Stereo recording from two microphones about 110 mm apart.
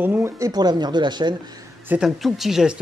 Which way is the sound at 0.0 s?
20° right (ahead or behind).